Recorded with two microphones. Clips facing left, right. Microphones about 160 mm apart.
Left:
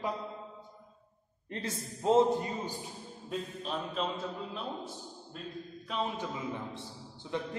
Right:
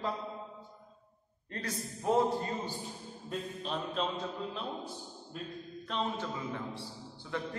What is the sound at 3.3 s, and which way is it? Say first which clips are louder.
A man's voice: left 1 dB; centre (ahead or behind).